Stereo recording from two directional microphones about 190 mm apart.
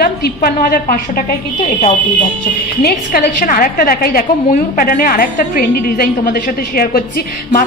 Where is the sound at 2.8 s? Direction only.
50° left (ahead or behind).